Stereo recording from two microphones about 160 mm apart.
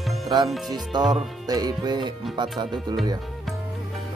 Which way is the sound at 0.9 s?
25° right (ahead or behind).